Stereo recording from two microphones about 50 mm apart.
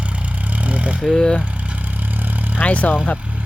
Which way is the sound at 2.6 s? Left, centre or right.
Left.